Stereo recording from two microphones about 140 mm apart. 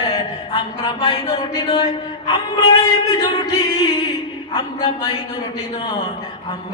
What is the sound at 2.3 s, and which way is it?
Mantra, 35° left (ahead or behind).